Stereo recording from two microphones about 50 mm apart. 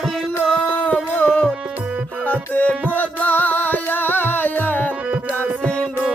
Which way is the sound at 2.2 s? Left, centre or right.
Left.